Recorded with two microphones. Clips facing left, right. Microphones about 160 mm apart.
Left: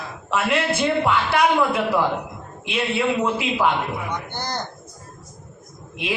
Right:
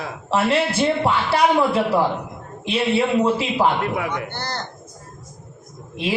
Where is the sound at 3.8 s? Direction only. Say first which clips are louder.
Right 4 dB; 75° right (ahead or behind).